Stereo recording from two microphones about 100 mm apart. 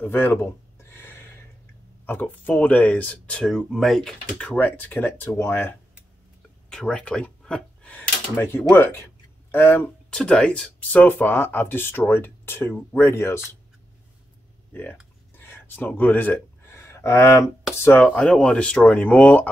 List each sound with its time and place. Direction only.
0.0 s a sound: 20° left (ahead or behind)
2.0 s speech: 15° left (ahead or behind)
6.7 s speech: 5° left (ahead or behind)
10.0 s speech: 10° left (ahead or behind); by 13.4 s 25° left (ahead or behind)
14.7 s a sound: 15° left (ahead or behind)
17.7 s speech: 25° left (ahead or behind)
18.0 s speech: 10° left (ahead or behind)